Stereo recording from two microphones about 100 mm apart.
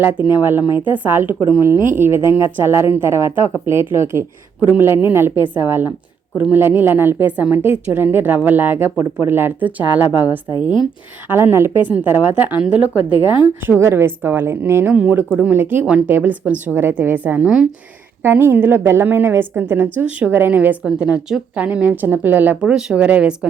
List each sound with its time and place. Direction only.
0.3 s a woman's voice: 20° right (ahead or behind)
11.3 s a woman's voice: 20° right (ahead or behind)
11.9 s a woman's voice: 15° right (ahead or behind)
18.2 s a woman's voice: 20° right (ahead or behind)